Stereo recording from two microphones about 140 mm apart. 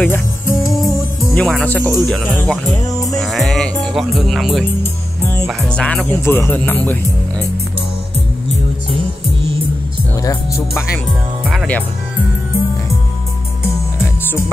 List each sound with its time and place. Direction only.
0.0 s music: 15° left (ahead or behind)
1.3 s speech: 5° left (ahead or behind)
3.2 s music: centre (ahead or behind)
3.8 s speech: centre (ahead or behind)
6.0 s speech: 15° left (ahead or behind)
11.5 s music: 10° left (ahead or behind)